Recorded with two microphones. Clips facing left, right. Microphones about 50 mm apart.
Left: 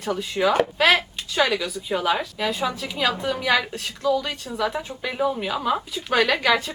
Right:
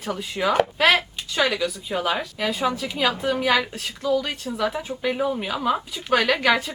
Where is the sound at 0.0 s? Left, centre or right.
Centre.